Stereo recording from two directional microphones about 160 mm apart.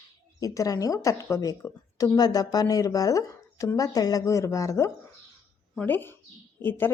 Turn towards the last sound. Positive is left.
turn(degrees=15)  # may be behind; listen again after turning